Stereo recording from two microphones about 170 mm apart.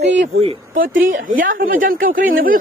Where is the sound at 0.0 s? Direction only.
90° right.